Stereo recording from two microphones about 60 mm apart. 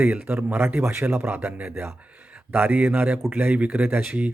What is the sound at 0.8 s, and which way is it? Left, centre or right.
A man's voice, right.